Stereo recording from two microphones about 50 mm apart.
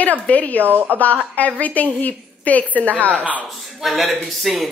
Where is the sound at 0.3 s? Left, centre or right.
Left.